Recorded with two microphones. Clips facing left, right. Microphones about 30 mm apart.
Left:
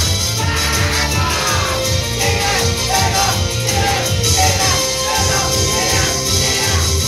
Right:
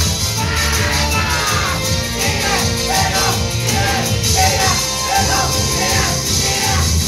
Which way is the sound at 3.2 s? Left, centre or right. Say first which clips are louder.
Even; centre.